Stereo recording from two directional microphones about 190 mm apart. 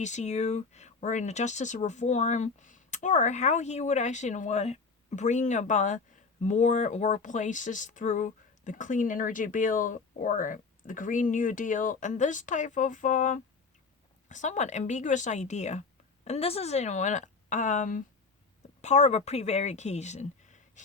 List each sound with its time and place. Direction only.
0.0 s speech: 40° left (ahead or behind)